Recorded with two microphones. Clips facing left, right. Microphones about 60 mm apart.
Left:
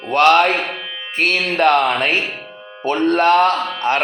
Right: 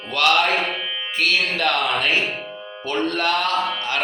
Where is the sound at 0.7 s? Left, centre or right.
Left.